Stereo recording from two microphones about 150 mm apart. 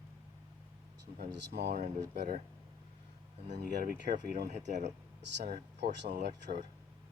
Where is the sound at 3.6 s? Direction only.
85° right.